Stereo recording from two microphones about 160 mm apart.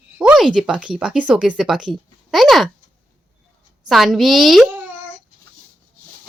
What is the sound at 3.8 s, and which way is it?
Speech, centre (ahead or behind).